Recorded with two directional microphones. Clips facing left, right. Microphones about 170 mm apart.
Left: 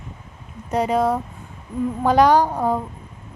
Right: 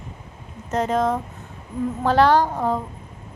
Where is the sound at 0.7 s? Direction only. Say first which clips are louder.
Left 2 dB; 10° left (ahead or behind).